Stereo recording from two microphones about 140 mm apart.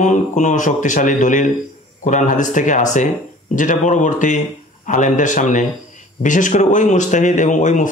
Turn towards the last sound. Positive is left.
turn(degrees=65)  # may be behind; listen again after turning